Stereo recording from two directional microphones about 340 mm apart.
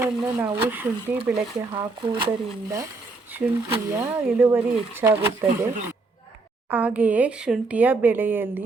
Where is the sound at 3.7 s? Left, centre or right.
Centre.